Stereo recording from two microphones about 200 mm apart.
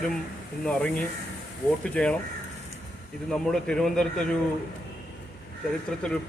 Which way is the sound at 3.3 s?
5° left (ahead or behind).